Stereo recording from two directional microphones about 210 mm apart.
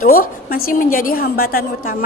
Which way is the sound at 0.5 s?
40° left (ahead or behind).